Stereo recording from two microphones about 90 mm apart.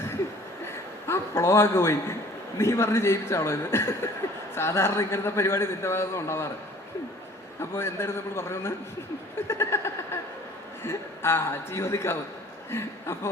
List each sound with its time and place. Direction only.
0.7 s a sound: 25° left (ahead or behind)
2.6 s a man's voice: 30° left (ahead or behind)
7.6 s a man's voice: 25° left (ahead or behind)